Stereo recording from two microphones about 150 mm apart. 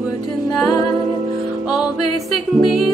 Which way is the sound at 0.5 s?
Centre (ahead or behind).